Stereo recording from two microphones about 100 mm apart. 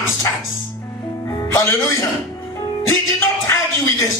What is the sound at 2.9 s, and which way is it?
Speech, 25° left (ahead or behind).